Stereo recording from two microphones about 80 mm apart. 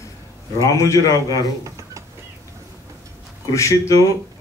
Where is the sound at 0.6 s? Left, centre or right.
Left.